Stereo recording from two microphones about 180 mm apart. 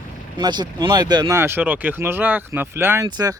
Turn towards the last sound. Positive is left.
turn(degrees=-20)  # may be behind; listen again after turning